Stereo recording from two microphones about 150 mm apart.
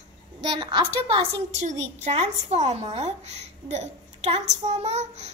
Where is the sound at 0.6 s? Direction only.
30° right (ahead or behind).